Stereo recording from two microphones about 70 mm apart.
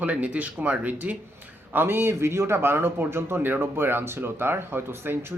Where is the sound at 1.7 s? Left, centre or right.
Right.